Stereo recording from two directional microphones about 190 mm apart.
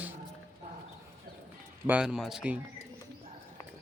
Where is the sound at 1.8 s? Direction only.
5° right (ahead or behind).